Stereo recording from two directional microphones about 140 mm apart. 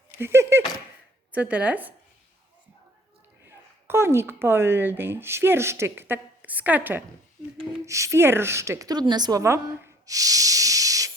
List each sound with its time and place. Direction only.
0.2 s speech: 15° right (ahead or behind)
3.4 s a woman's voice: 20° right (ahead or behind)
10.1 s hiss: 25° right (ahead or behind)